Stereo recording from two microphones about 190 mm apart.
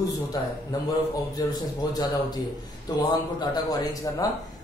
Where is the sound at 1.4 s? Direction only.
20° left (ahead or behind).